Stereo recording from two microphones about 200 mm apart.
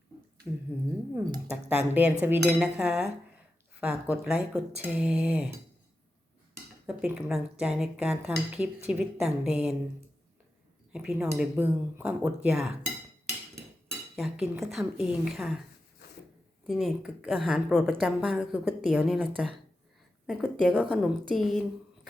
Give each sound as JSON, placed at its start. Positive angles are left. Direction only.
{"t": 1.1, "sound": "a woman's voice", "side_deg": -20}
{"t": 6.8, "sound": "a woman's voice", "side_deg": -5}
{"t": 10.9, "sound": "a woman's voice", "side_deg": -5}
{"t": 14.2, "sound": "a woman's voice", "side_deg": 0}
{"t": 16.6, "sound": "a woman's voice", "side_deg": 0}